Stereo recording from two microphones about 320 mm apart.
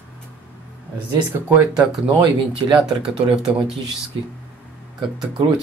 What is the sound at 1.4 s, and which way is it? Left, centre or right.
Speech, centre.